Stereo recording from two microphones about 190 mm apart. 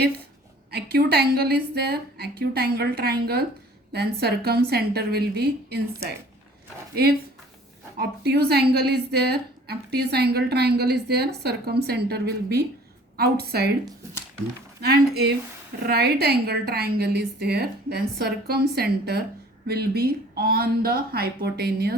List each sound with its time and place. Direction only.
0.7 s a woman's voice: 55° right (ahead or behind)
7.9 s a woman's voice: 60° right (ahead or behind)
14.8 s a woman's voice: 55° right (ahead or behind)